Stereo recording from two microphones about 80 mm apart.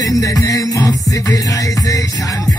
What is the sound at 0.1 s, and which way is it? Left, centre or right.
Music, left.